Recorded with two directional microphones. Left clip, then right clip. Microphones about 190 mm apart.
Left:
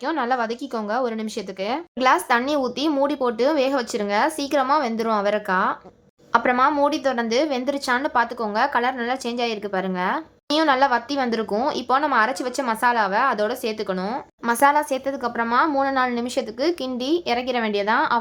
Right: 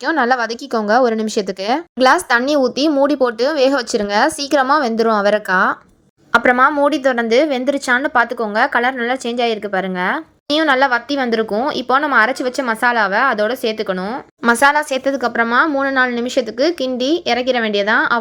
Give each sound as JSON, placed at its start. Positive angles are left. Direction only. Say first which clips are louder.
{"t": 0.0, "sound": "a woman's voice", "louder": "right 7 dB", "side_deg": -30}